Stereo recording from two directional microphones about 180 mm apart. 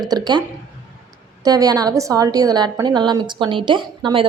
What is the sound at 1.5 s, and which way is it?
A woman's voice, 20° right (ahead or behind).